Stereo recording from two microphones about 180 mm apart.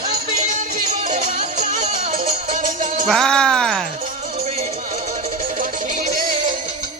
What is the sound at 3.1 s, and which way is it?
Speech, 5° left (ahead or behind).